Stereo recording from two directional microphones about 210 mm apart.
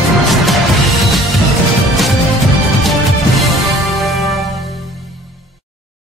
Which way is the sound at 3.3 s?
Centre (ahead or behind).